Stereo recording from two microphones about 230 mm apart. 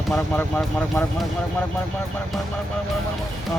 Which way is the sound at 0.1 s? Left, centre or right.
Centre.